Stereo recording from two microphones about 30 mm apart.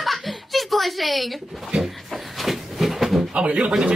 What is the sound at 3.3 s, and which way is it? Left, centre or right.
Speech, right.